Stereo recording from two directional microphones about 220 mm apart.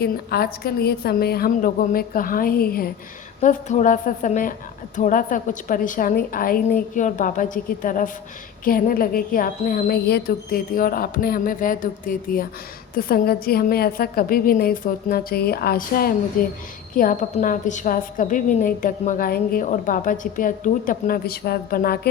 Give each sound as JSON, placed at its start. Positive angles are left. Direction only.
{"t": 0.0, "sound": "a woman's voice", "side_deg": 45}